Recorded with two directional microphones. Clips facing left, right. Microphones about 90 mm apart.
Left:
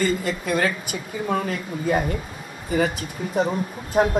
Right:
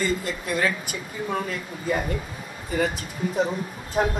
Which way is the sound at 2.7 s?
60° left (ahead or behind).